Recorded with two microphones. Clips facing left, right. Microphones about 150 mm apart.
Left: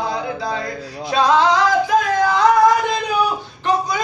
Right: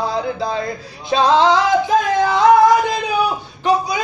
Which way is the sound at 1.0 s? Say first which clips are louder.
Right 2 dB; 25° right (ahead or behind).